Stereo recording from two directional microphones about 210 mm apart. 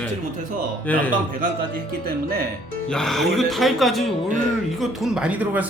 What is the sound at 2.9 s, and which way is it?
Speech, centre (ahead or behind).